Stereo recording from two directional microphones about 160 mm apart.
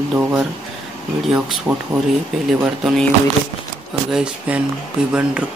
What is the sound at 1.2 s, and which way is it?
Speech, centre (ahead or behind).